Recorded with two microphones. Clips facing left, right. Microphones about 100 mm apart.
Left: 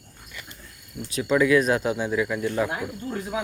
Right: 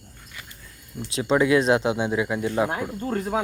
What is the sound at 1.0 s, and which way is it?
Speech, 30° right (ahead or behind).